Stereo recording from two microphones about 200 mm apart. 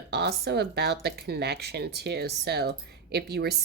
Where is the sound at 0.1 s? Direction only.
55° right (ahead or behind).